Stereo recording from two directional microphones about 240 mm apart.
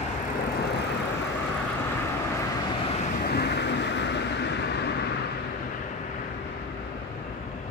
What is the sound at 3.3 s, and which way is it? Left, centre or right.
Vehicle, left.